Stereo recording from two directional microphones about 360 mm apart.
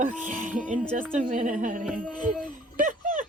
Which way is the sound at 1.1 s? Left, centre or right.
Right.